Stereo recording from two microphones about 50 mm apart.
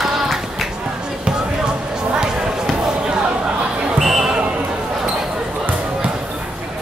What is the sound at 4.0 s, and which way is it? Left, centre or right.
Basketball bounce, centre.